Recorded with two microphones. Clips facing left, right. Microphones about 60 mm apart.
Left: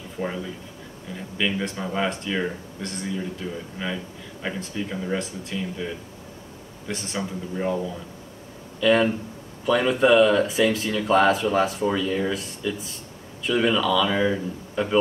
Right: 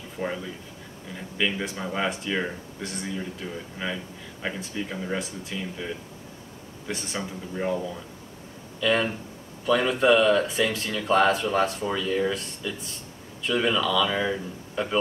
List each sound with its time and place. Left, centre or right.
0.2 s speech: centre